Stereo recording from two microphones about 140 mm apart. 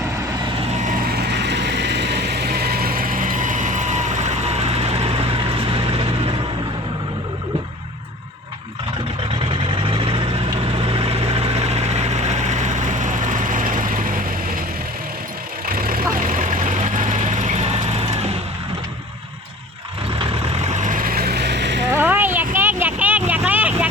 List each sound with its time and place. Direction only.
2.6 s mechanisms: 90° right; by 5.2 s 45° right (ahead or behind)
9.5 s vehicle: 40° right (ahead or behind); by 14.6 s 75° right (ahead or behind)
15.6 s vehicle: 90° right
16.1 s vehicle: 70° right (ahead or behind); by 18.3 s 50° right (ahead or behind)
20.1 s vehicle: 45° right (ahead or behind); by 21.3 s 90° right
21.9 s vehicle: 15° right (ahead or behind)